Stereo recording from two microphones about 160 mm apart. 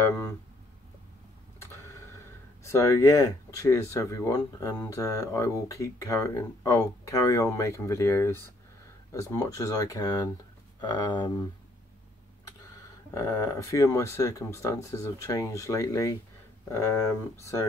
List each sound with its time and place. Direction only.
2.6 s speech: 20° left (ahead or behind)
13.1 s speech: 20° left (ahead or behind)